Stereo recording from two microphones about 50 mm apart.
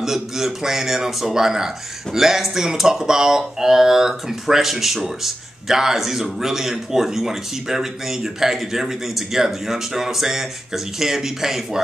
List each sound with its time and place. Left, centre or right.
0.0 s speech: centre